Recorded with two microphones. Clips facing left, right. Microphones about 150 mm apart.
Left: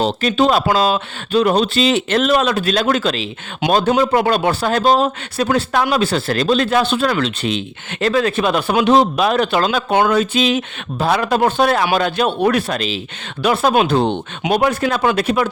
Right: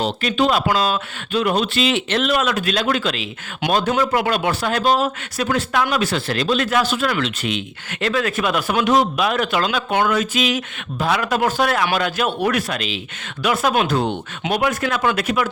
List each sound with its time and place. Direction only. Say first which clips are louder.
0.0 s speech: left 4 dB; 35° left (ahead or behind)
3.9 s speech: left 4 dB; 20° left (ahead or behind)
4.2 s speech: left 4 dB; 35° left (ahead or behind)